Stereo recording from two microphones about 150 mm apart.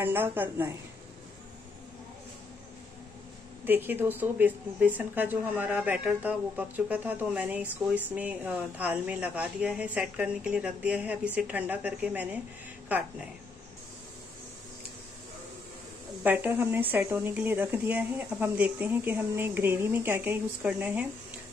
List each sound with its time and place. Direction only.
0.0 s speech: 15° right (ahead or behind)
3.6 s speech: 15° right (ahead or behind)
16.2 s speech: 10° right (ahead or behind)